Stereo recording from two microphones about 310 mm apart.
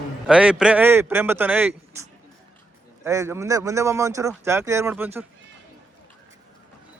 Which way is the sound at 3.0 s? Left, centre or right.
Centre.